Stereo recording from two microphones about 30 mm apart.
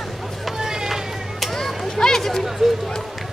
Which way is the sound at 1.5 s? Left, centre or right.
Centre.